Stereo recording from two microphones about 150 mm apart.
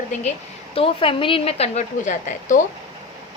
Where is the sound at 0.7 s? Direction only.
35° left (ahead or behind); by 2.6 s 55° left (ahead or behind).